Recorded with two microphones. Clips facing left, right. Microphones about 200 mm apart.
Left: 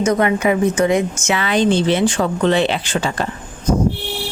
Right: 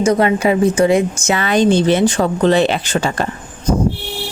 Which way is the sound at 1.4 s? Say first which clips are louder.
Right 3 dB; 45° right (ahead or behind).